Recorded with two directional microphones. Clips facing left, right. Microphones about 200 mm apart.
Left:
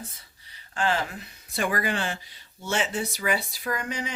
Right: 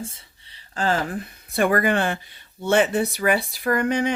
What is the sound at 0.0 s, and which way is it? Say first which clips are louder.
Speech: right 8 dB; 25° right (ahead or behind).